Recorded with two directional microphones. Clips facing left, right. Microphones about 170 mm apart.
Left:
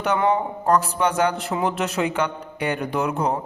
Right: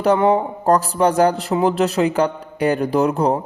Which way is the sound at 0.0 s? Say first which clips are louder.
Right 5 dB; 35° right (ahead or behind).